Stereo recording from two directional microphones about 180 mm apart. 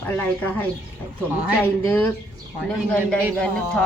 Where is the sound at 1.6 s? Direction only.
10° left (ahead or behind).